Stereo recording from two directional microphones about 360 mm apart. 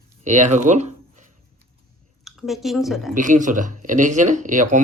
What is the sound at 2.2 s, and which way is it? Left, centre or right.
Speech, centre.